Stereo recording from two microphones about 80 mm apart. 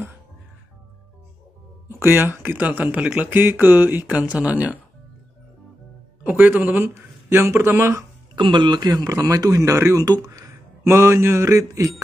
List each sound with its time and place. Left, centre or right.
1.9 s speech: right
4.1 s speech: centre
6.2 s a man's voice: right
8.4 s a man's voice: right
10.2 s mantra: right